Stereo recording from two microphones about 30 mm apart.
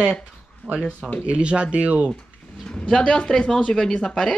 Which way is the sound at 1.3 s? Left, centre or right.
Right.